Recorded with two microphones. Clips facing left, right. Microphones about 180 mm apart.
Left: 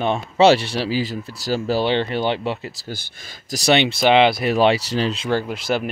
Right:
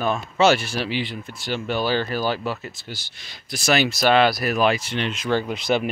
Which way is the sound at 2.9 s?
50° left (ahead or behind).